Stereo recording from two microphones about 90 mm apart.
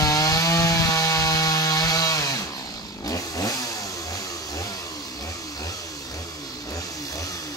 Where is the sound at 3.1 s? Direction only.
40° left (ahead or behind).